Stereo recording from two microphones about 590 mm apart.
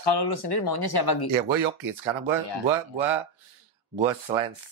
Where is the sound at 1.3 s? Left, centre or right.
Right.